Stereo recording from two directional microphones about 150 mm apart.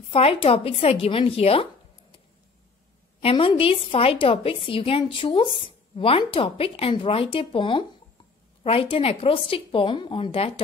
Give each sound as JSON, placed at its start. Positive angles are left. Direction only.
{"t": 0.1, "sound": "a woman's voice", "side_deg": 40}
{"t": 3.2, "sound": "a woman's voice", "side_deg": 40}